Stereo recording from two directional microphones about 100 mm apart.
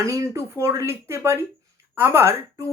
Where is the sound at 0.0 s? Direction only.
30° right (ahead or behind).